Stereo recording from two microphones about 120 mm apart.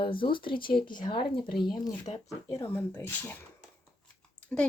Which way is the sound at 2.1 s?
55° left (ahead or behind).